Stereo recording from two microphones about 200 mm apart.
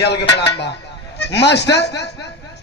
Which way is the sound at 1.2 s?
60° left (ahead or behind).